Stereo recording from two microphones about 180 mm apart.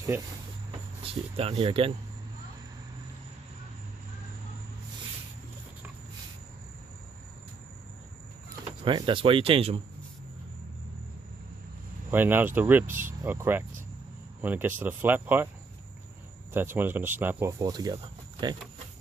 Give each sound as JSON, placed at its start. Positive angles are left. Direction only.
{"t": 0.1, "sound": "speech", "side_deg": -10}
{"t": 1.0, "sound": "speech", "side_deg": -35}
{"t": 8.8, "sound": "speech", "side_deg": -25}
{"t": 12.1, "sound": "speech", "side_deg": -10}
{"t": 16.5, "sound": "speech", "side_deg": -10}